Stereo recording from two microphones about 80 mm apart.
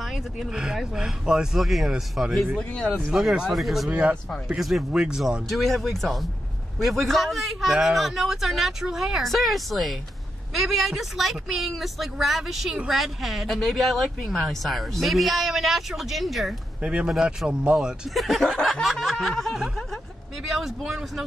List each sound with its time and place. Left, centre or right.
0.0 s speech: centre
2.7 s speech: centre
3.1 s speech: centre
3.9 s speech: centre
4.6 s speech: centre
16.8 s speech: centre